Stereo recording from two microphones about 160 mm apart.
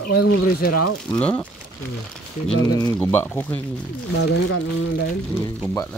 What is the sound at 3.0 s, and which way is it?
Speech, 10° left (ahead or behind).